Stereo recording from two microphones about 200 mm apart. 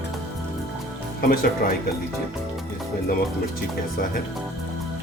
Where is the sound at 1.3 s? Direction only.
45° left (ahead or behind).